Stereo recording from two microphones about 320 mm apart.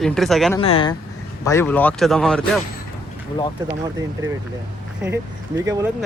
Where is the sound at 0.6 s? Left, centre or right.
Centre.